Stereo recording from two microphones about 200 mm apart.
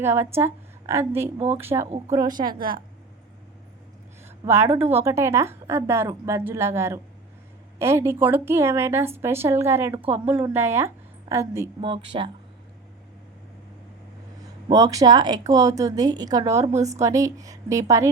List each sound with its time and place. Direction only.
0.0 s a woman's voice: 10° right (ahead or behind)
2.6 s a woman's voice: 45° right (ahead or behind)
4.4 s a woman's voice: 15° right (ahead or behind)
11.9 s a woman's voice: 25° right (ahead or behind)
14.7 s a woman's voice: 15° right (ahead or behind)
16.7 s a woman's voice: 35° right (ahead or behind)
17.0 s a woman's voice: 15° right (ahead or behind)